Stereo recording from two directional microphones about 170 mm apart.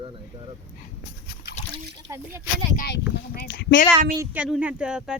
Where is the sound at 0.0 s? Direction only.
30° right (ahead or behind).